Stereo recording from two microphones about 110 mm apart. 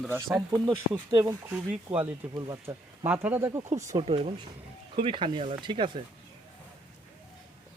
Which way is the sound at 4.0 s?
60° right (ahead or behind).